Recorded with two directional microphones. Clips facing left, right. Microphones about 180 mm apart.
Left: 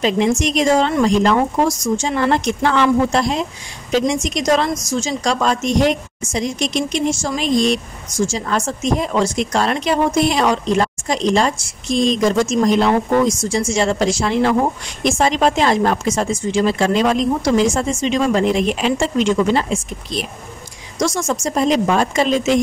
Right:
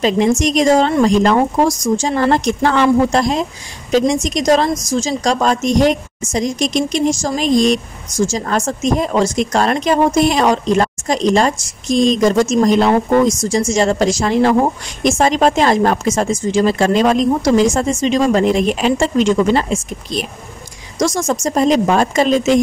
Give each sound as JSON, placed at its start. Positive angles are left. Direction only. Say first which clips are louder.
{"t": 0.0, "sound": "a woman's voice", "louder": "right 3 dB", "side_deg": -40}